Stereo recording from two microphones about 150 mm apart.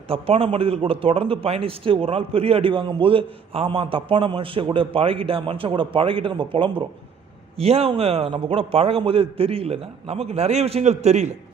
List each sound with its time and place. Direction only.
0.1 s a man's voice: 40° right (ahead or behind)